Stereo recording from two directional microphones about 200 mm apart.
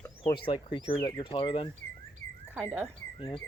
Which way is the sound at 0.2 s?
25° left (ahead or behind).